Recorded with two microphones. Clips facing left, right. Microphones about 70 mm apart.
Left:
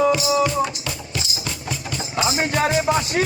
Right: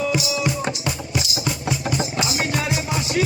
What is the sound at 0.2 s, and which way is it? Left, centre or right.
Music, left.